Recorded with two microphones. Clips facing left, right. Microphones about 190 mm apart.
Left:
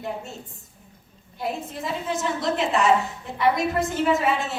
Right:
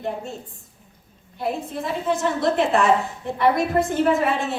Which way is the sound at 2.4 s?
55° right (ahead or behind).